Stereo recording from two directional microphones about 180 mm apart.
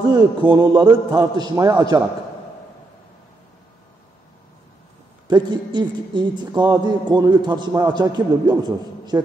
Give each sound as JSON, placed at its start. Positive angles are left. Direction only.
{"t": 0.1, "sound": "speech", "side_deg": -25}
{"t": 5.3, "sound": "speech", "side_deg": -25}